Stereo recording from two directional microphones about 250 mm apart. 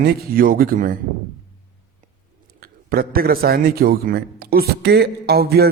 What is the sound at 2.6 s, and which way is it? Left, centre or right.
A man's voice, right.